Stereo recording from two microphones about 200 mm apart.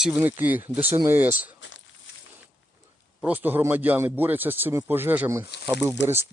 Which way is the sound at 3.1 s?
5° right (ahead or behind).